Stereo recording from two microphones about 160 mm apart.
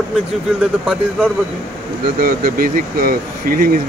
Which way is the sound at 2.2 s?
65° right (ahead or behind).